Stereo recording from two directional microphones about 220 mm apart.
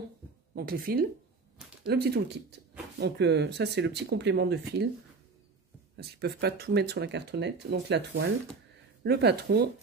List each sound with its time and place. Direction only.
0.6 s speech: 40° right (ahead or behind)
5.9 s speech: 50° right (ahead or behind)